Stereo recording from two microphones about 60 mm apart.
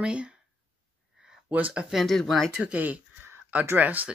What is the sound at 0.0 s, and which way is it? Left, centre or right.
Speech, centre.